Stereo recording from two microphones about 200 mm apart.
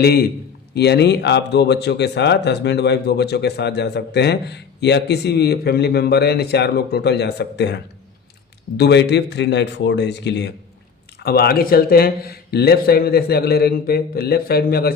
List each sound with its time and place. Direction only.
0.0 s speech: 50° left (ahead or behind)
8.8 s speech: 60° left (ahead or behind)